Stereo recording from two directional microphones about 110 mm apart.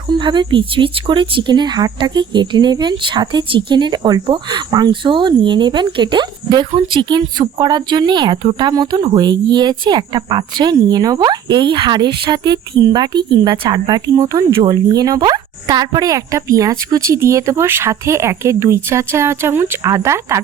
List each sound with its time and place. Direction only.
0.1 s speech: 45° right (ahead or behind); by 20.4 s 25° right (ahead or behind)